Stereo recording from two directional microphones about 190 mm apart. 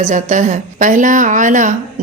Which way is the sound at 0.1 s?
40° right (ahead or behind).